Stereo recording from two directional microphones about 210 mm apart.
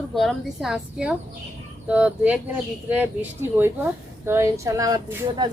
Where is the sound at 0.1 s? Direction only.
Centre (ahead or behind).